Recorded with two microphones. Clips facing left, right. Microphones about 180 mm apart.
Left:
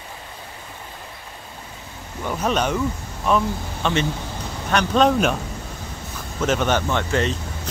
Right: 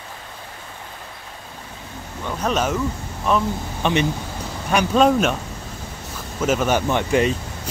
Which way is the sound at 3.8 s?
15° right (ahead or behind).